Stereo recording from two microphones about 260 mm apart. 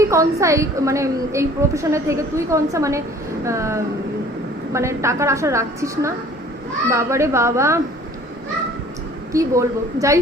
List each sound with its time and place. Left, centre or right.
0.0 s a woman's voice: centre
9.3 s a woman's voice: centre